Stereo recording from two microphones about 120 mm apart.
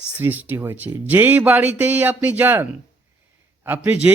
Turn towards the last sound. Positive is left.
turn(degrees=-15)  # may be behind; listen again after turning